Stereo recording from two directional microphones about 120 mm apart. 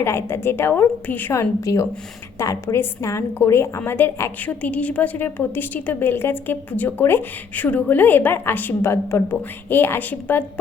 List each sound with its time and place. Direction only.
0.0 s a woman's voice: 20° left (ahead or behind)